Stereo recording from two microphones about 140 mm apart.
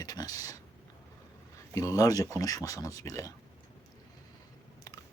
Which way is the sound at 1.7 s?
25° left (ahead or behind).